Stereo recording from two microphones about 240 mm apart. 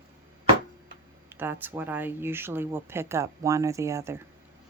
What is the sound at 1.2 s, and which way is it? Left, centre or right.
Speech, centre.